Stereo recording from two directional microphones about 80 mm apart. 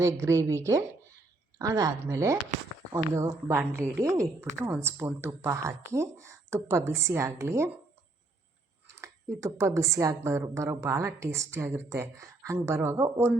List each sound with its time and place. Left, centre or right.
0.0 s a woman's voice: right
9.0 s speech: right
10.2 s speech: right